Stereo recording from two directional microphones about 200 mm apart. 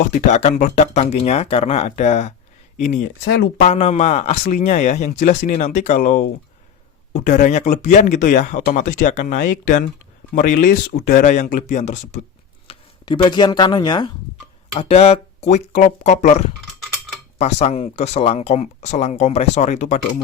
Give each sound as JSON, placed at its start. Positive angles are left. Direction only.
{"t": 0.0, "sound": "speech", "side_deg": 40}
{"t": 3.2, "sound": "speech", "side_deg": 55}
{"t": 3.6, "sound": "speech", "side_deg": 30}
{"t": 12.6, "sound": "speech", "side_deg": 25}